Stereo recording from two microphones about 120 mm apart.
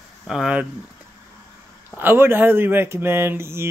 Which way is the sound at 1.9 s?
15° right (ahead or behind).